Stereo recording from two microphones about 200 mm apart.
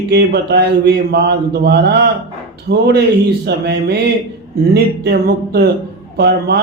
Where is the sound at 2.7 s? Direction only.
55° right (ahead or behind).